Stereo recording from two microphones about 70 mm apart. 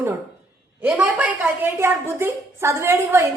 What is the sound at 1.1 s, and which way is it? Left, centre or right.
Speech, centre.